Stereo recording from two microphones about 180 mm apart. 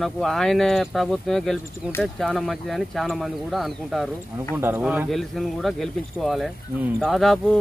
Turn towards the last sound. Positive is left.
turn(degrees=0)  # may be behind; listen again after turning